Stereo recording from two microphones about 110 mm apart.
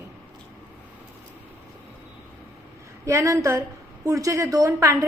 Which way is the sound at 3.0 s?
25° right (ahead or behind).